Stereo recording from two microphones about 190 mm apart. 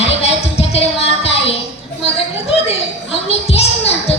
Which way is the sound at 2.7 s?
30° left (ahead or behind).